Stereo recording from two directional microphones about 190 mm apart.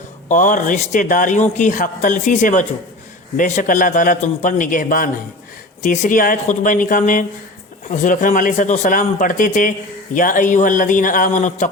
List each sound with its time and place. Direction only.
0.3 s a man's voice: 40° left (ahead or behind)